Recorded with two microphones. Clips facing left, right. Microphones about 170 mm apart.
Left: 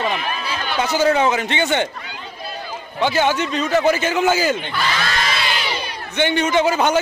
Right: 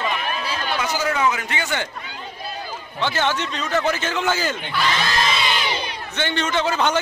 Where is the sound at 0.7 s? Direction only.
30° left (ahead or behind).